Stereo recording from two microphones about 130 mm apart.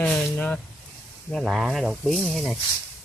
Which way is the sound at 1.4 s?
5° right (ahead or behind).